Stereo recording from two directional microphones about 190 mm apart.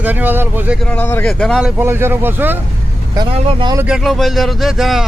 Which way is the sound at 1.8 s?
10° right (ahead or behind).